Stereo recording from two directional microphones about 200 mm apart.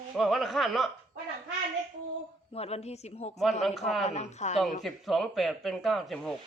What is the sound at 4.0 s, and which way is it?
Speech, 35° left (ahead or behind).